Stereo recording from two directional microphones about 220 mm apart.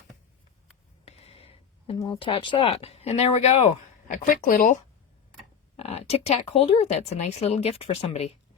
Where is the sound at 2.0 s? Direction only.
20° left (ahead or behind).